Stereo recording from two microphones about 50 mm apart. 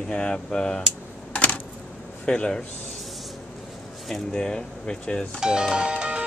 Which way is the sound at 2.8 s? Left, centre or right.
Centre.